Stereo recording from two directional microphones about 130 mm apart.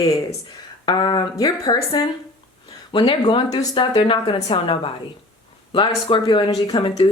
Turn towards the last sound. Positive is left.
turn(degrees=40)  # may be behind; listen again after turning